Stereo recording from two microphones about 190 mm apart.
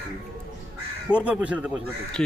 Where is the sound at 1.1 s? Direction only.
5° right (ahead or behind).